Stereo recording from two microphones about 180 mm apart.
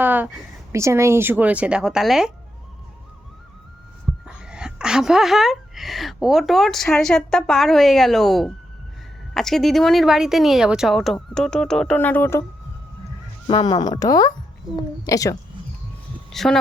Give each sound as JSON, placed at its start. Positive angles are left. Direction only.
{"t": 0.0, "sound": "speech", "side_deg": -10}
{"t": 4.3, "sound": "speech", "side_deg": -5}
{"t": 13.5, "sound": "speech", "side_deg": 25}
{"t": 16.3, "sound": "speech", "side_deg": 0}